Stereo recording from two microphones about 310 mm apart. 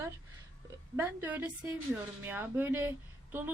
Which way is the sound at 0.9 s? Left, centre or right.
Centre.